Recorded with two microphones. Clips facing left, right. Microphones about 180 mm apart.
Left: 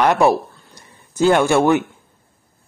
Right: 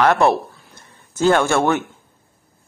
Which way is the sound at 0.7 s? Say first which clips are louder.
Left 4 dB; 15° left (ahead or behind).